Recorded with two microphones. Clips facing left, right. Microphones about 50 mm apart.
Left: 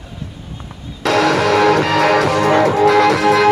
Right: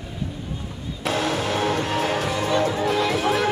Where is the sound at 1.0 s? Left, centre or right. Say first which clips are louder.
Left 10 dB; left.